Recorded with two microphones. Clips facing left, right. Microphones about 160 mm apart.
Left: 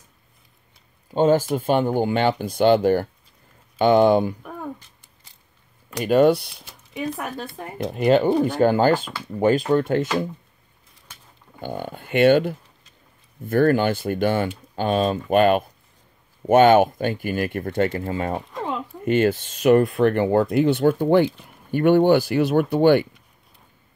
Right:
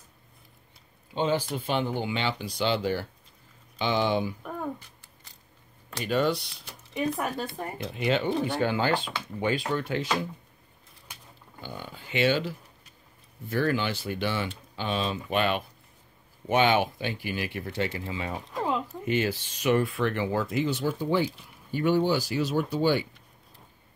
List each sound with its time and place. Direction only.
1.1 s speech: 45° left (ahead or behind)
4.4 s a sound: centre (ahead or behind)
6.0 s speech: 50° left (ahead or behind)
6.5 s speech: centre (ahead or behind)
7.7 s speech: 45° left (ahead or behind)
11.6 s speech: 55° left (ahead or behind)
18.5 s a sound: centre (ahead or behind)
19.0 s speech: 50° left (ahead or behind)